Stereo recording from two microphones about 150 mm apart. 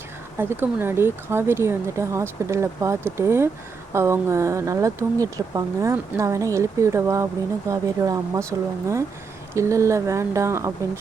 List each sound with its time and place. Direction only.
0.3 s speech: 15° right (ahead or behind)